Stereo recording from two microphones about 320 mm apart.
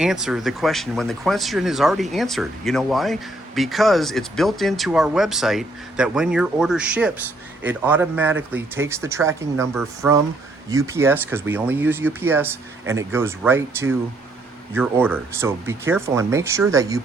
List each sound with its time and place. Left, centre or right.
0.0 s a man's voice: centre